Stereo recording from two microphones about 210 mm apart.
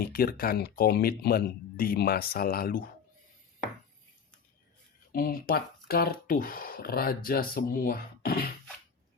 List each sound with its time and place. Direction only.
0.0 s speech: 45° left (ahead or behind)
5.1 s speech: 45° left (ahead or behind)